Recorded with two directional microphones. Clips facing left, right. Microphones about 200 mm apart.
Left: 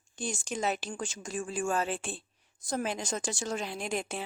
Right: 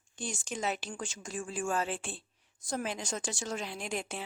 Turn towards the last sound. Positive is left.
turn(degrees=45)  # may be behind; listen again after turning